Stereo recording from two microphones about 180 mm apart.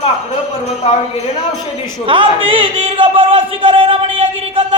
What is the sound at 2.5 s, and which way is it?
Speech, 30° right (ahead or behind).